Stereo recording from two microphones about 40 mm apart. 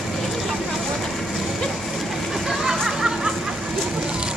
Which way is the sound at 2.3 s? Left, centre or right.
Centre.